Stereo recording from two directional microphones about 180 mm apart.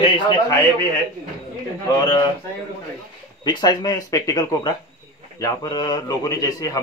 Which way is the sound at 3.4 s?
20° left (ahead or behind).